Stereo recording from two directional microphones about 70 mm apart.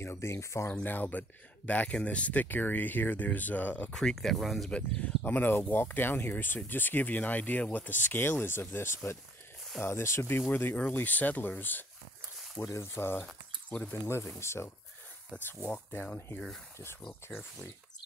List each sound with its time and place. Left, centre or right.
0.0 s speech: left
0.8 s speech: left
3.9 s speech: centre
4.6 s speech: centre
12.6 s speech: left
15.4 s speech: left
17.3 s speech: centre